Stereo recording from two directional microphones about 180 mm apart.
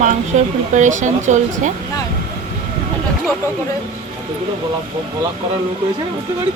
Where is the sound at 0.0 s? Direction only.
45° right (ahead or behind).